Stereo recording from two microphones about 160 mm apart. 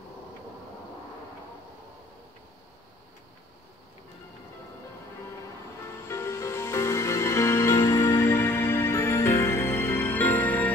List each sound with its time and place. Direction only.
5.9 s music: 15° left (ahead or behind)